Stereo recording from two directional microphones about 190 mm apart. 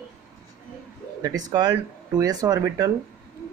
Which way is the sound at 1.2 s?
20° right (ahead or behind).